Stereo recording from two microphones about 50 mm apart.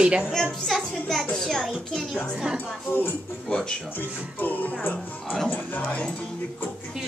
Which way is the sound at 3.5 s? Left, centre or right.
Centre.